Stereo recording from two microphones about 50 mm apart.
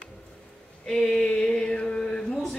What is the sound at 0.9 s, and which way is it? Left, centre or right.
A woman's voice, centre.